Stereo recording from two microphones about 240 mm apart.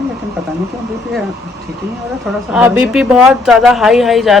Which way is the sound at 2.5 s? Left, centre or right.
Centre.